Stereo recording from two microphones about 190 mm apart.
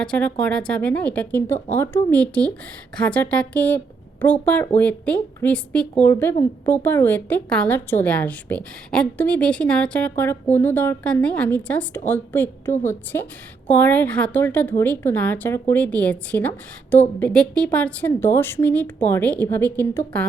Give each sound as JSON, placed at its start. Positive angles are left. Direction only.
{"t": 0.0, "sound": "a woman's voice", "side_deg": 5}